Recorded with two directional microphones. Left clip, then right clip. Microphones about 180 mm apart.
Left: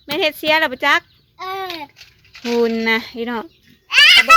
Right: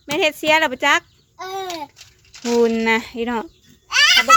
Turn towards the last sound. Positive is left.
turn(degrees=-20)  # may be behind; listen again after turning